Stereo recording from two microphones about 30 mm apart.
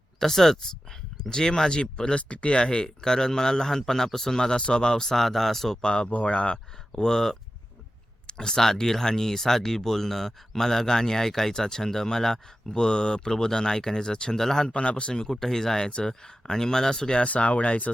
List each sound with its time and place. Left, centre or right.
0.2 s a man's voice: centre; by 2.1 s left
2.1 s speech: left
2.6 s a man's voice: left; by 5.8 s centre
5.8 s speech: left
6.9 s a man's voice: centre
14.7 s speech: left
15.1 s a man's voice: left
17.2 s speech: left